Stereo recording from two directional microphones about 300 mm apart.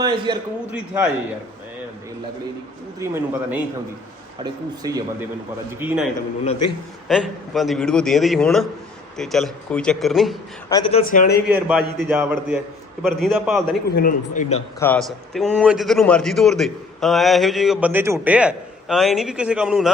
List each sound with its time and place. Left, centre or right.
0.0 s a man's voice: centre
3.0 s a man's voice: centre
6.4 s a man's voice: centre
7.1 s a man's voice: centre
10.7 s a man's voice: centre
11.4 s a man's voice: centre
13.9 s a man's voice: left
14.8 s a man's voice: centre